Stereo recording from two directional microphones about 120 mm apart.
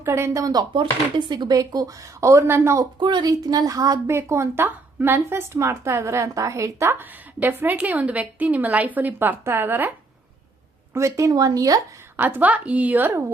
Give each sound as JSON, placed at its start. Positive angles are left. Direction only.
{"t": 0.0, "sound": "a woman's voice", "side_deg": -20}
{"t": 0.7, "sound": "speech", "side_deg": -40}
{"t": 3.0, "sound": "a woman's voice", "side_deg": -40}
{"t": 10.9, "sound": "a woman's voice", "side_deg": -25}
{"t": 12.1, "sound": "a woman's voice", "side_deg": -15}